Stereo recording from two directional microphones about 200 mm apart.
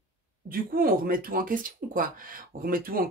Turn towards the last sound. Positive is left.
turn(degrees=-45)  # may be behind; listen again after turning